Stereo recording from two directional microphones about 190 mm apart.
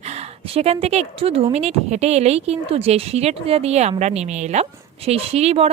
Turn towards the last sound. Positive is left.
turn(degrees=-35)  # may be behind; listen again after turning